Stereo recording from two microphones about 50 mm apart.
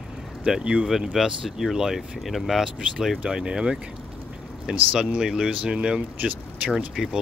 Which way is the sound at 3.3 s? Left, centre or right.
Centre.